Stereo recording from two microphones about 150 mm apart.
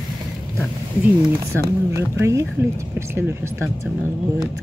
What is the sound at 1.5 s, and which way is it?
Speech, 20° right (ahead or behind).